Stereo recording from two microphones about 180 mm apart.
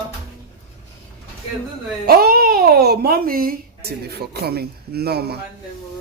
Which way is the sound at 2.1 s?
60° right (ahead or behind).